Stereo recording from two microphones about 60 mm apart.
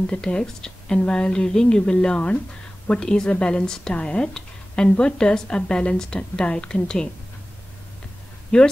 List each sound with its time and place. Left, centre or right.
0.0 s speech: centre
8.5 s speech: left